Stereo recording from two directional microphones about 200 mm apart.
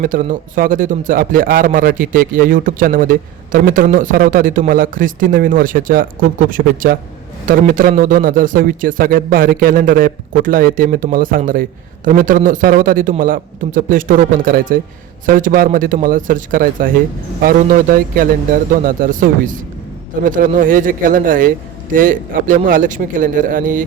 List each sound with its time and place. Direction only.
0.0 s a man's voice: 45° right (ahead or behind)